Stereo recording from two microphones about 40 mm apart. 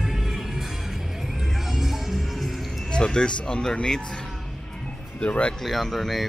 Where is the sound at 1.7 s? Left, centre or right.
Centre.